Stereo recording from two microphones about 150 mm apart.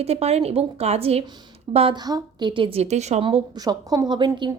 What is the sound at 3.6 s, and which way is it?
Speech, 25° right (ahead or behind).